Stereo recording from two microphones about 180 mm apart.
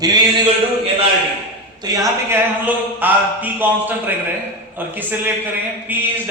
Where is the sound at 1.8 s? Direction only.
15° right (ahead or behind).